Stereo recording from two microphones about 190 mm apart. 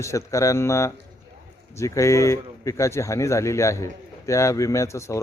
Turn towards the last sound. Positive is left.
turn(degrees=15)  # may be behind; listen again after turning